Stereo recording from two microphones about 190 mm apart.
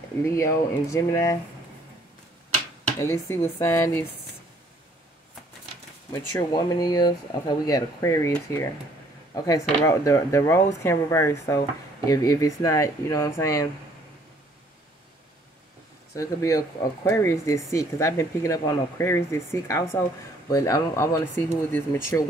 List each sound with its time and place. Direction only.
0.2 s speech: 15° left (ahead or behind)
3.0 s speech: 15° left (ahead or behind)
6.3 s speech: 20° left (ahead or behind)
16.2 s speech: 15° left (ahead or behind)